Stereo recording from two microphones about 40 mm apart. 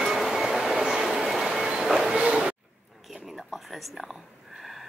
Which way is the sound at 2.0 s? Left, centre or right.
Centre.